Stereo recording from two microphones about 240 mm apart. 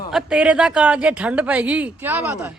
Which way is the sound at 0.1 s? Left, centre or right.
Centre.